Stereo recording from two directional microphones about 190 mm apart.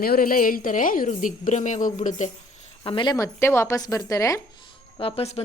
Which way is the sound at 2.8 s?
25° left (ahead or behind).